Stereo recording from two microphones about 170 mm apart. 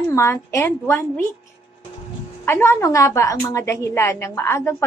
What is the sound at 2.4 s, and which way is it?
A woman's voice, 15° left (ahead or behind).